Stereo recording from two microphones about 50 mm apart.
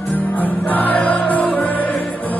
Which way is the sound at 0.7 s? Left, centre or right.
Left.